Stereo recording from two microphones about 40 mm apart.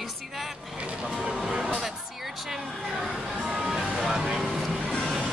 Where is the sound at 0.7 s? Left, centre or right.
Right.